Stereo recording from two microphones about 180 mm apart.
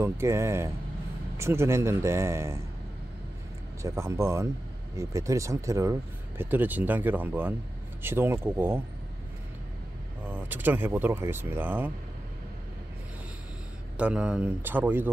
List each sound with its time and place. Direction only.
0.0 s speech: 15° right (ahead or behind)
3.8 s speech: 15° right (ahead or behind)
10.2 s speech: 10° right (ahead or behind)
13.9 s speech: 5° right (ahead or behind)